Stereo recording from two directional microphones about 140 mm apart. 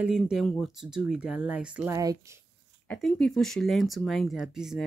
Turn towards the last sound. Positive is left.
turn(degrees=-5)  # may be behind; listen again after turning